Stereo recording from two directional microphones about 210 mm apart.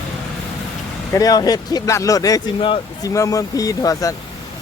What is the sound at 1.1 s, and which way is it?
Speech, 15° left (ahead or behind).